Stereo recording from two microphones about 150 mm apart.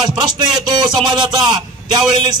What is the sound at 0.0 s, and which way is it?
A man's voice, 30° right (ahead or behind).